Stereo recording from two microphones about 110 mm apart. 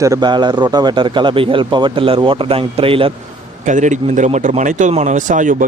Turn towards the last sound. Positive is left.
turn(degrees=-90)